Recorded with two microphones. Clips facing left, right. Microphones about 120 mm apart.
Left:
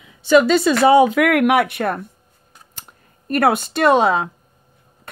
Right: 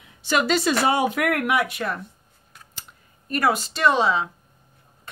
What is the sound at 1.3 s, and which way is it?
Speech, 80° left.